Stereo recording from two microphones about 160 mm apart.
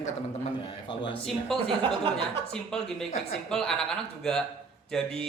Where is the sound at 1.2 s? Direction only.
Centre (ahead or behind).